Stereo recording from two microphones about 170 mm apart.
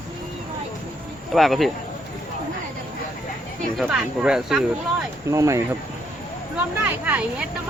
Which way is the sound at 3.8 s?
5° right (ahead or behind).